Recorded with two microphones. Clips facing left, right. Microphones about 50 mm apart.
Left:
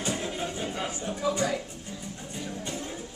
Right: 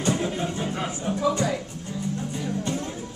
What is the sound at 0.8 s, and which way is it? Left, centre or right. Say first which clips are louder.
Music: right 4 dB; centre.